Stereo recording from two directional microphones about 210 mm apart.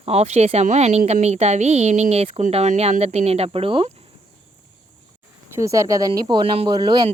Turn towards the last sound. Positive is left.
turn(degrees=-20)  # may be behind; listen again after turning